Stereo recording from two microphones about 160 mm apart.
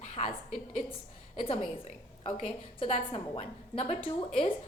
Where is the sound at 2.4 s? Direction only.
35° left (ahead or behind).